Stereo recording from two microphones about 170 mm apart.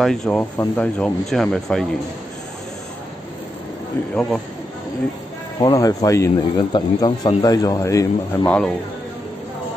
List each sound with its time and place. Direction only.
0.0 s speech: 5° left (ahead or behind)
4.1 s speech: centre (ahead or behind)
5.6 s speech: 20° left (ahead or behind)
8.5 s speech: 5° left (ahead or behind)